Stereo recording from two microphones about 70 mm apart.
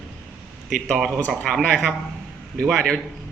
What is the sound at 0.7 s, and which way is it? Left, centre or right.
A man's voice, centre.